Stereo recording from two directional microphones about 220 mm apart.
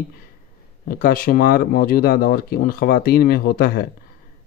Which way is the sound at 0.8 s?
40° left (ahead or behind).